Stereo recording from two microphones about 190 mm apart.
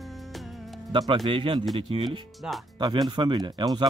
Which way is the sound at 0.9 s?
20° right (ahead or behind).